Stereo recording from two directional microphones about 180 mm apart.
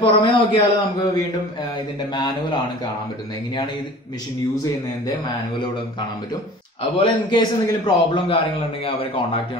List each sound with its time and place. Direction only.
0.0 s a man's voice: 25° left (ahead or behind)
7.0 s a man's voice: 25° left (ahead or behind)